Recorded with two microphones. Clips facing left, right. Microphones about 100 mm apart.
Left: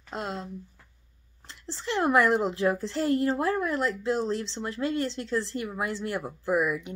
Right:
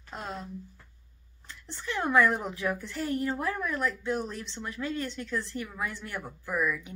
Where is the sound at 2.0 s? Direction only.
25° left (ahead or behind).